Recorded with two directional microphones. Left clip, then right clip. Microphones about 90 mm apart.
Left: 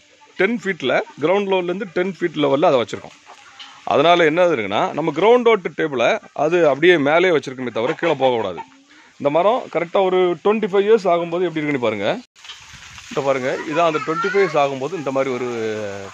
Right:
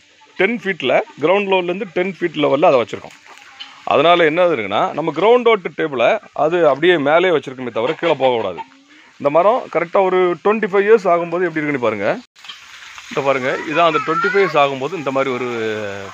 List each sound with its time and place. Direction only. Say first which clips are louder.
0.4 s a man's voice: right 2 dB; 20° left (ahead or behind)
2.3 s a man's voice: right 2 dB; 35° left (ahead or behind)
2.9 s a man's voice: right 2 dB; 20° left (ahead or behind)
3.8 s a man's voice: right 2 dB; 30° left (ahead or behind)
7.9 s a man's voice: right 3 dB; 30° left (ahead or behind)
8.2 s speech: right 2 dB; 45° left (ahead or behind)
9.2 s a man's voice: right 3 dB; 30° left (ahead or behind)
11.2 s speech: right 2 dB; 15° left (ahead or behind)
11.8 s speech: right 3 dB; 5° left (ahead or behind)
13.1 s speech: right 2 dB; 15° right (ahead or behind)